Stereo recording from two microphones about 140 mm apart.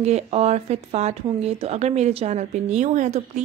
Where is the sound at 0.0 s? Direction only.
50° right (ahead or behind).